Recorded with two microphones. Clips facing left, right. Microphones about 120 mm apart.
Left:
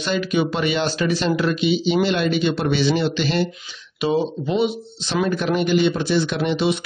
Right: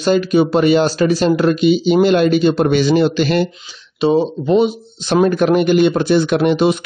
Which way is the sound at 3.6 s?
30° right (ahead or behind).